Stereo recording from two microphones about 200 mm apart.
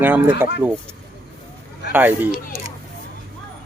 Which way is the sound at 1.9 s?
10° right (ahead or behind).